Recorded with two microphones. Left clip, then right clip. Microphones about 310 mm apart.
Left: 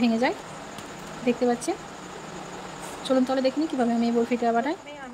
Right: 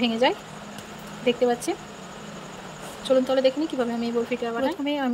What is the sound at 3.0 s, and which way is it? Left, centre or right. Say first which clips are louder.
Speech: right 3 dB; centre.